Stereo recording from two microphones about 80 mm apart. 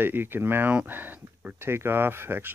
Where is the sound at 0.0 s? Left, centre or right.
Right.